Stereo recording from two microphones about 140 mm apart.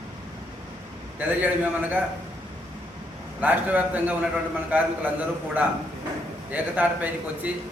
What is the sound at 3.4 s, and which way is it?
A man's voice, 10° right (ahead or behind).